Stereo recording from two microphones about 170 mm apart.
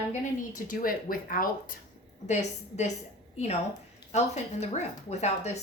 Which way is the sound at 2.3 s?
40° left (ahead or behind).